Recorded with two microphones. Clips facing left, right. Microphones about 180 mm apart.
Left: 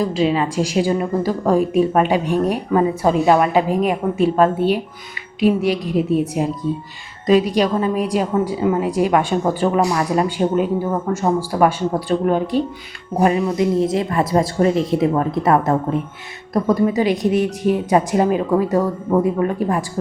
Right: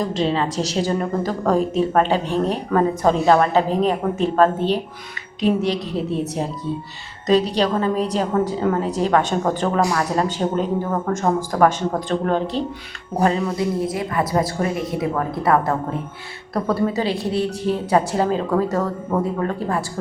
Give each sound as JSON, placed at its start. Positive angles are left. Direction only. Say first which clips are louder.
{"t": 0.0, "sound": "a woman's voice", "louder": "left 3 dB", "side_deg": 5}